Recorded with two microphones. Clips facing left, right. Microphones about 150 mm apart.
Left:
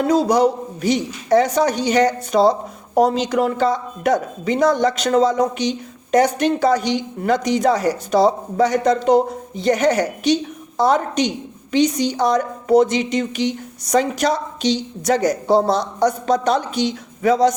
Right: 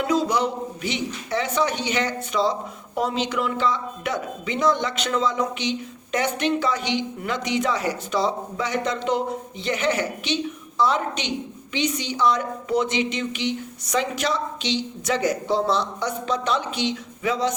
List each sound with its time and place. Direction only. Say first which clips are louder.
0.0 s a man's voice: left 7 dB; 40° left (ahead or behind)